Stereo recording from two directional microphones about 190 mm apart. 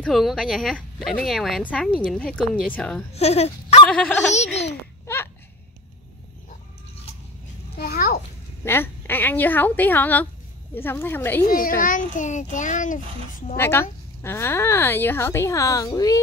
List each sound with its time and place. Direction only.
0.0 s a woman's voice: centre (ahead or behind)
3.2 s speech: 35° left (ahead or behind)
3.9 s speech: 5° left (ahead or behind)
4.3 s a child's voice: 35° left (ahead or behind)
5.0 s a sound: 15° left (ahead or behind)
7.7 s babbling: 55° left (ahead or behind)
8.6 s speech: 10° left (ahead or behind)
11.4 s a child's voice: 50° left (ahead or behind)
13.6 s speech: 10° left (ahead or behind)